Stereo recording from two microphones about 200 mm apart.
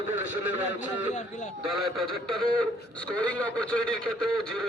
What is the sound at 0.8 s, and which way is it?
Speech, 35° left (ahead or behind).